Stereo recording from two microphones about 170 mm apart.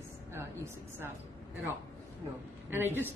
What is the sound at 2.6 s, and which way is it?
Speech, 15° right (ahead or behind).